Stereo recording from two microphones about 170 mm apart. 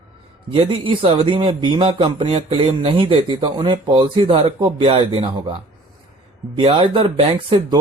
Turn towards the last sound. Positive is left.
turn(degrees=-35)  # may be behind; listen again after turning